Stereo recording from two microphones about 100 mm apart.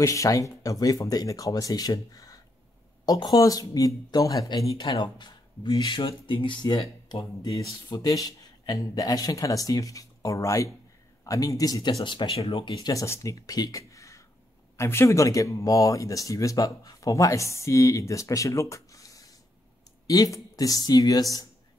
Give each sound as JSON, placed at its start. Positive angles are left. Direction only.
{"t": 0.0, "sound": "speech", "side_deg": 35}
{"t": 4.9, "sound": "speech", "side_deg": 55}
{"t": 5.9, "sound": "speech", "side_deg": 60}
{"t": 7.9, "sound": "speech", "side_deg": 40}
{"t": 12.0, "sound": "speech", "side_deg": 55}
{"t": 12.8, "sound": "speech", "side_deg": 30}